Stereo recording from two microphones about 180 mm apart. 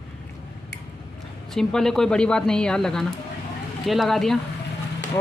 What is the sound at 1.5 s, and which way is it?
Speech, 5° left (ahead or behind).